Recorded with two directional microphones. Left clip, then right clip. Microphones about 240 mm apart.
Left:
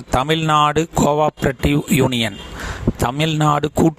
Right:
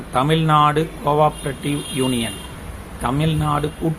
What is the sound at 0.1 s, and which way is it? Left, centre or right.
Speech, left.